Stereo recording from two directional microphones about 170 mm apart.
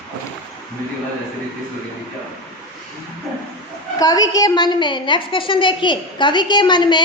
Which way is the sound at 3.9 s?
20° left (ahead or behind).